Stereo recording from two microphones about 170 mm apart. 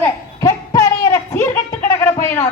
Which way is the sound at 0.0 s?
20° left (ahead or behind).